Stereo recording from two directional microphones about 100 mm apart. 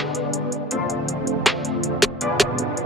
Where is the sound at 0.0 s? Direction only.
Centre (ahead or behind).